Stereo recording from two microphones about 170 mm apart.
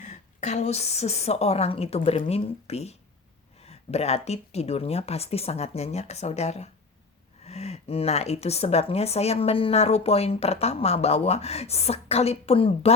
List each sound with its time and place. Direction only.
0.0 s a woman's voice: 40° left (ahead or behind)